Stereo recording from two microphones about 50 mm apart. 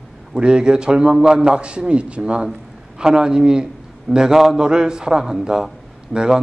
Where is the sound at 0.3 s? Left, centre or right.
Centre.